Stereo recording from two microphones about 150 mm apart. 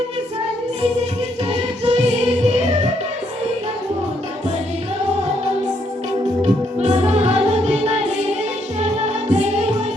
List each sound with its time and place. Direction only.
1.5 s music: 45° right (ahead or behind)
6.7 s music: 45° right (ahead or behind)